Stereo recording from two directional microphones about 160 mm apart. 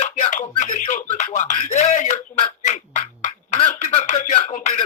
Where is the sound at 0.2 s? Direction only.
50° left (ahead or behind).